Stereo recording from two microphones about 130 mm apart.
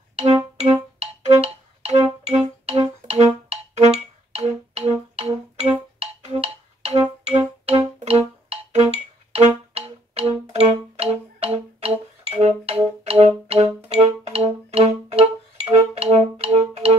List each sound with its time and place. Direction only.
0.6 s music: 50° right (ahead or behind)